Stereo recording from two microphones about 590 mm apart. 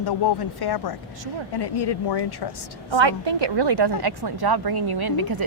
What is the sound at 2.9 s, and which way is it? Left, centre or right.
A woman's voice, right.